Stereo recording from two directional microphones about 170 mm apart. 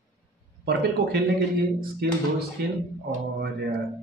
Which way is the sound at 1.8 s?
65° right (ahead or behind).